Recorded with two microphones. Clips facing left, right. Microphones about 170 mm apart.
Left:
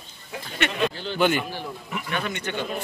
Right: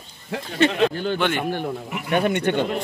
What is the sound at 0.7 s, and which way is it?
Speech, 60° right (ahead or behind).